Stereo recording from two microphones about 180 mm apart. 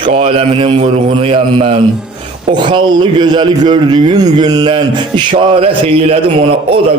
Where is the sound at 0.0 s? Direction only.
30° right (ahead or behind).